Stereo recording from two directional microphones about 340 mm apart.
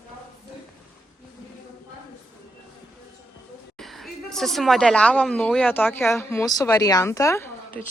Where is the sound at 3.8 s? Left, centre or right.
Centre.